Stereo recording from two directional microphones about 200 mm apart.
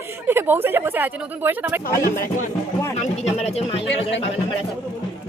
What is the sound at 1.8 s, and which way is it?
Speech, 45° left (ahead or behind).